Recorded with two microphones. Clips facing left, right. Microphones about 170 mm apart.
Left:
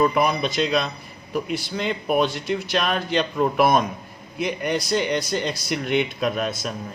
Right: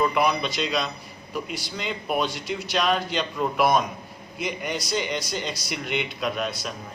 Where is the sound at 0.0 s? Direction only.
45° left (ahead or behind).